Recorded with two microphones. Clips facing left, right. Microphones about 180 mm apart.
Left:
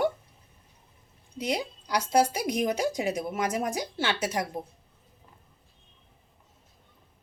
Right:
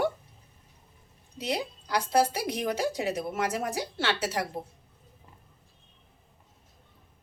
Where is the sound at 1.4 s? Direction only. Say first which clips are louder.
Left 1 dB; 15° left (ahead or behind).